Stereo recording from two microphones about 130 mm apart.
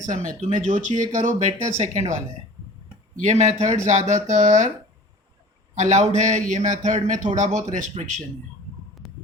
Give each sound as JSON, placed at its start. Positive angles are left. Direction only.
{"t": 0.1, "sound": "speech", "side_deg": -60}
{"t": 5.7, "sound": "speech", "side_deg": -60}
{"t": 9.0, "sound": "a sound", "side_deg": 0}